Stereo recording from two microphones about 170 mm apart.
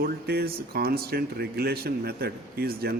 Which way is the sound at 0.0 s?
65° right (ahead or behind).